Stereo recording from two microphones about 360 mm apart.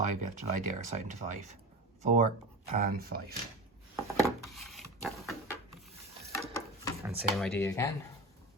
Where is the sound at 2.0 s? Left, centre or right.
Centre.